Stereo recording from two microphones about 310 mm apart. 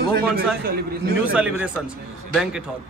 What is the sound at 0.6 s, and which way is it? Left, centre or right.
Speech, right.